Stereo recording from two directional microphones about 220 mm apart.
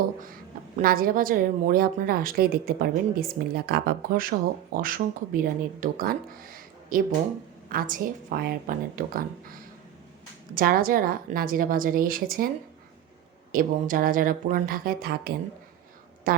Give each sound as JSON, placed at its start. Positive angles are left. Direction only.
{"t": 0.8, "sound": "speech", "side_deg": -40}
{"t": 13.5, "sound": "speech", "side_deg": -40}
{"t": 16.3, "sound": "speech", "side_deg": -40}